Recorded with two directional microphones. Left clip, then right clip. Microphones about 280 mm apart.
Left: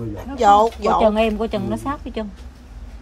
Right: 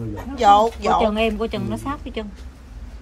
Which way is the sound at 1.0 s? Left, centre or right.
Left.